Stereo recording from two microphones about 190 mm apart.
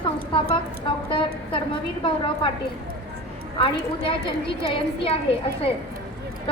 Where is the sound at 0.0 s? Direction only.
25° left (ahead or behind).